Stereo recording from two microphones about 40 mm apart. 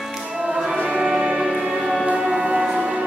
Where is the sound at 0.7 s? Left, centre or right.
Right.